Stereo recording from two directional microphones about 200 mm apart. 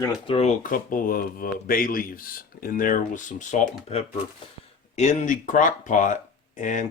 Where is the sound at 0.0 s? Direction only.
30° left (ahead or behind).